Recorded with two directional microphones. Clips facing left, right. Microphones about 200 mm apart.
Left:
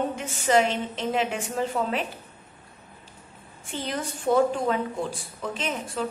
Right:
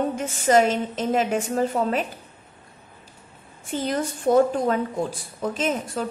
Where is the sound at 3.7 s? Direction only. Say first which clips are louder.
Right 6 dB; 40° right (ahead or behind).